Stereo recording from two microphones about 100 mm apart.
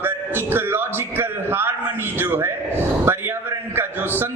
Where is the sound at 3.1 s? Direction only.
20° right (ahead or behind).